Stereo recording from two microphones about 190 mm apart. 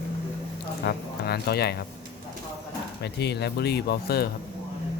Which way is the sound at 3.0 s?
60° left (ahead or behind).